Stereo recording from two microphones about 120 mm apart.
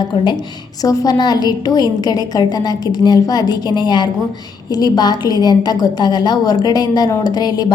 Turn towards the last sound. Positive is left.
turn(degrees=35)  # may be behind; listen again after turning